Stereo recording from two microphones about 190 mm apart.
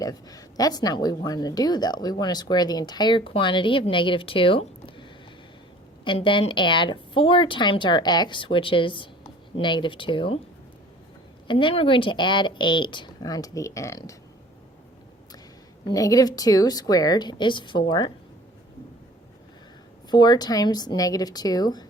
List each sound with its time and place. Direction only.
0.0 s a woman's voice: 20° left (ahead or behind)
6.1 s a woman's voice: 25° left (ahead or behind)
11.4 s a woman's voice: 25° left (ahead or behind)
15.9 s a woman's voice: 20° left (ahead or behind)
20.1 s a woman's voice: 20° left (ahead or behind)